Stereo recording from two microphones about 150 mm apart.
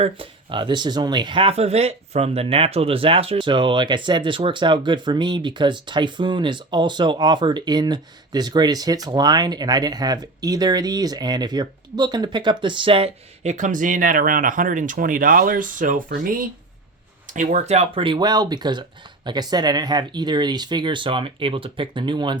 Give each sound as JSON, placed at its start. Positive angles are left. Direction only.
{"t": 0.0, "sound": "speech", "side_deg": -35}
{"t": 17.3, "sound": "speech", "side_deg": -50}